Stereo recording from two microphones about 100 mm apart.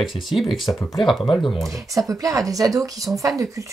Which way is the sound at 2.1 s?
35° right (ahead or behind).